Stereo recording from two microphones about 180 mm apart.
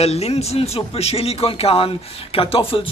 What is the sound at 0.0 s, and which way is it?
Speech, 35° left (ahead or behind).